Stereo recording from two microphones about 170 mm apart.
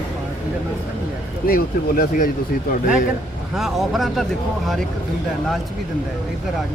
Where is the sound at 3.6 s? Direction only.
Centre (ahead or behind).